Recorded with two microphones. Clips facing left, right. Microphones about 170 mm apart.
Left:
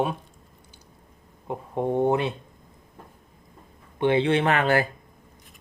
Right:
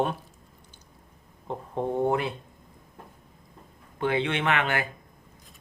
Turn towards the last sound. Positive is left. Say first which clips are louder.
# left 5 dB
turn(degrees=35)  # may be behind; listen again after turning